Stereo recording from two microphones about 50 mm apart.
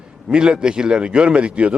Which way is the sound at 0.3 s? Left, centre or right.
Centre.